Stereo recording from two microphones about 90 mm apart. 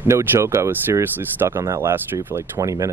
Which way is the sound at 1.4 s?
35° right (ahead or behind).